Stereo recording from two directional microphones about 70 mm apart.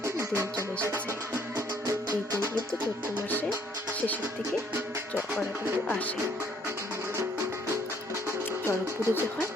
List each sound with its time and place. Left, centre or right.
0.0 s music: right
9.0 s speech: right